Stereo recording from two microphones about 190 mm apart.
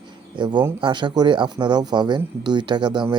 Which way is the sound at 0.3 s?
25° right (ahead or behind).